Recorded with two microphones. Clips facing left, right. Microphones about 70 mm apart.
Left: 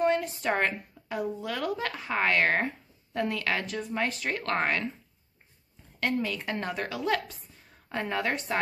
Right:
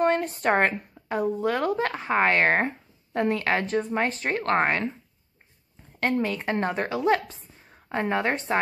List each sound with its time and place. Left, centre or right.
0.0 s a woman's voice: right
5.9 s a woman's voice: right